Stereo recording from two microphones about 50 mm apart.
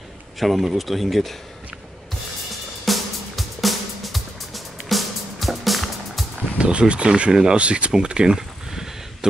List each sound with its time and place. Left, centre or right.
0.4 s speech: centre
2.8 s music: centre
6.6 s speech: right
7.9 s a sound: centre